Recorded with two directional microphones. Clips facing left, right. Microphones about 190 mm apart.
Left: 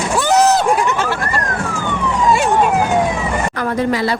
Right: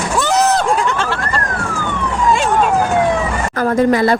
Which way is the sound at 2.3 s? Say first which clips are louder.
Even; 10° left (ahead or behind).